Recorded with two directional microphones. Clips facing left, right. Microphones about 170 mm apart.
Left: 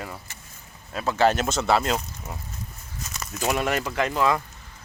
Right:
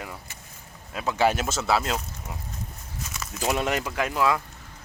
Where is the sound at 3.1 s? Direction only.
5° right (ahead or behind).